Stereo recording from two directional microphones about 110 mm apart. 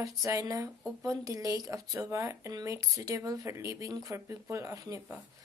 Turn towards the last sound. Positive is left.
turn(degrees=-25)  # may be behind; listen again after turning